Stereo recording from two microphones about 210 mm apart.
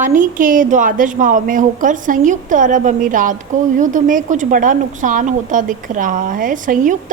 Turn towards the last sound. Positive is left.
turn(degrees=-40)  # may be behind; listen again after turning